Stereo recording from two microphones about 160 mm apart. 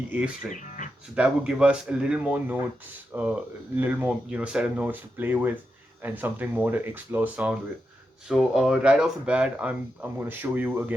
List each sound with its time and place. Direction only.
0.5 s music: 50° left (ahead or behind)
1.1 s speech: 5° right (ahead or behind)